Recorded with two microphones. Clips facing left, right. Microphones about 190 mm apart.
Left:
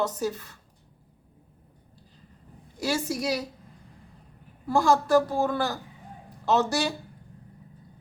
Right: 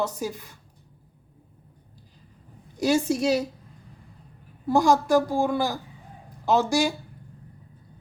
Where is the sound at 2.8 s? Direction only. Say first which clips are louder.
Right 6 dB; 20° right (ahead or behind).